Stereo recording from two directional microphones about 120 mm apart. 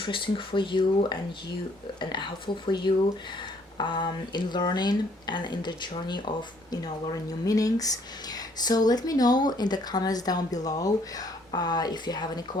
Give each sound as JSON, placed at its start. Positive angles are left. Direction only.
{"t": 0.0, "sound": "speech", "side_deg": 45}